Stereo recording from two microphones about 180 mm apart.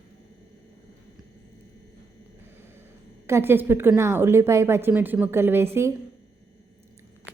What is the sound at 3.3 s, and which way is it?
A woman's voice, 15° right (ahead or behind).